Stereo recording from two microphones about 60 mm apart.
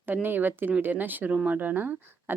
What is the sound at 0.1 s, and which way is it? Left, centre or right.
Speech, right.